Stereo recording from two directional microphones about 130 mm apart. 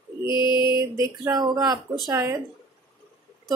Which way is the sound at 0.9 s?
20° right (ahead or behind).